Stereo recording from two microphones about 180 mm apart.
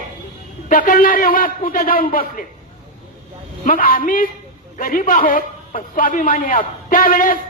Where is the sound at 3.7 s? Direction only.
50° left (ahead or behind).